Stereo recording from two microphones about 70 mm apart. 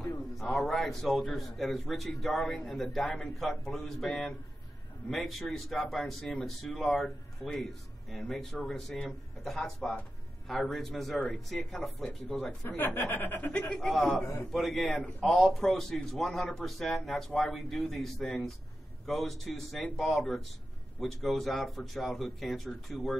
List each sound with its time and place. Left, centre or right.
0.4 s speech: centre
12.6 s speech: left
13.5 s a man's voice: centre
14.5 s speech: centre